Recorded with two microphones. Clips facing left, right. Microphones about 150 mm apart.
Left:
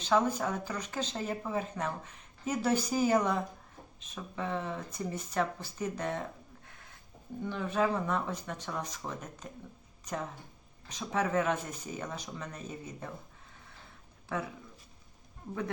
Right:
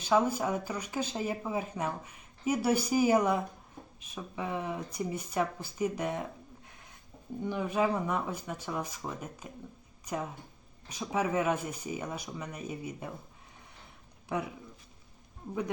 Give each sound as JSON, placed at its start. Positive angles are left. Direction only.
{"t": 0.0, "sound": "speech", "side_deg": -10}
{"t": 7.4, "sound": "speech", "side_deg": -15}
{"t": 14.3, "sound": "speech", "side_deg": -15}